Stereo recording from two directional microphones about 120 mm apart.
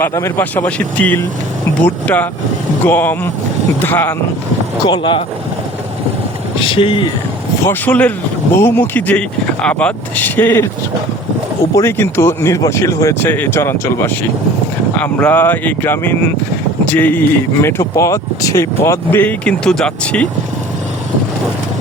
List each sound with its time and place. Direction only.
0.0 s speech: 25° left (ahead or behind)
4.8 s speech: 40° left (ahead or behind)
6.6 s speech: 45° left (ahead or behind)
7.7 s speech: 15° left (ahead or behind)
11.7 s speech: 20° left (ahead or behind)